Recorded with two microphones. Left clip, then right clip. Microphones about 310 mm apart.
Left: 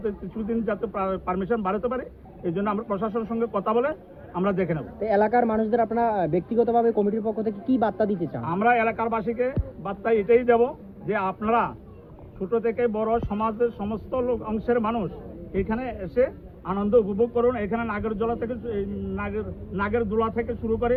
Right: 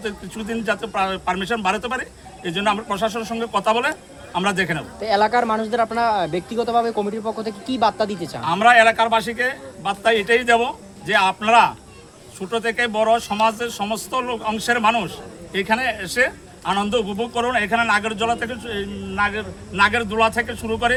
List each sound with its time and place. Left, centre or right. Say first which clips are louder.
0.0 s speech: right 1 dB; right
5.0 s speech: right 3 dB; centre
8.5 s a man's voice: right 9 dB; right